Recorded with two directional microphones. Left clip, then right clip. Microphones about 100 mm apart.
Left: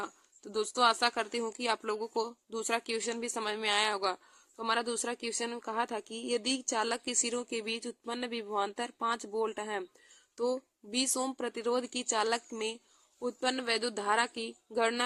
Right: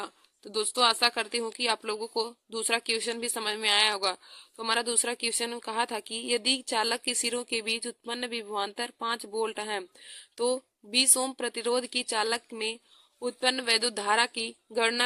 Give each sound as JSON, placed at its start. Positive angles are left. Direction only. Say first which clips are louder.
{"t": 0.4, "sound": "speech", "louder": "right 3 dB", "side_deg": -20}
{"t": 9.4, "sound": "a woman's voice", "louder": "right 3 dB", "side_deg": -25}